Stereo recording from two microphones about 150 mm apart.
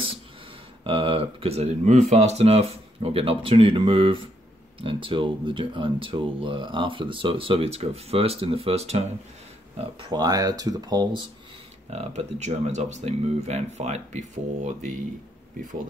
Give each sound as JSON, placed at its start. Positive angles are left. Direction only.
{"t": 0.8, "sound": "speech", "side_deg": -35}
{"t": 9.8, "sound": "speech", "side_deg": -35}
{"t": 11.9, "sound": "speech", "side_deg": -45}